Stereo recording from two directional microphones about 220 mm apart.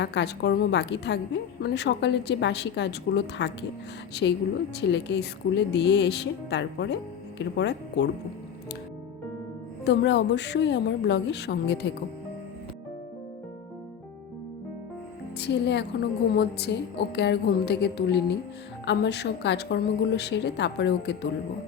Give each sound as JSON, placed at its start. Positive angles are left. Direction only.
{"t": 0.0, "sound": "a woman's voice", "side_deg": 50}
{"t": 9.8, "sound": "a woman's voice", "side_deg": 55}
{"t": 15.4, "sound": "a woman's voice", "side_deg": 50}